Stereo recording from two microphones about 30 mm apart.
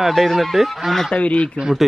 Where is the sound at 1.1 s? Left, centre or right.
Left.